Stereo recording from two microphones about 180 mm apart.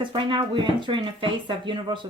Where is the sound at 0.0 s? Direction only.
25° right (ahead or behind).